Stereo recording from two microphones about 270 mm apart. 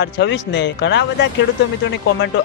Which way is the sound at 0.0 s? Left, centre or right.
Left.